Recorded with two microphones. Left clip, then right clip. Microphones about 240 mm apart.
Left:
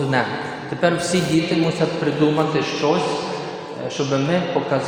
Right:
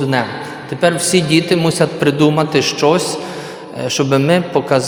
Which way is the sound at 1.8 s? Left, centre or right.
Right.